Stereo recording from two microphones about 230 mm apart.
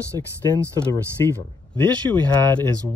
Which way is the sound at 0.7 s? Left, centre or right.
Centre.